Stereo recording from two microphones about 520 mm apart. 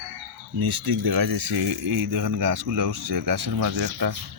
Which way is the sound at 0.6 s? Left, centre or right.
Right.